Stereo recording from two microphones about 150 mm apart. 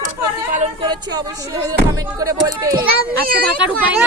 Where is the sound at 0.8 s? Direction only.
30° right (ahead or behind).